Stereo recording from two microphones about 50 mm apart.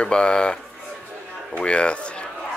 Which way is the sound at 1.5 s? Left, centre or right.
Left.